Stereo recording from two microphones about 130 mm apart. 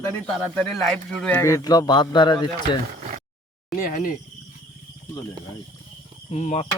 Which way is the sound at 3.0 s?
75° right (ahead or behind).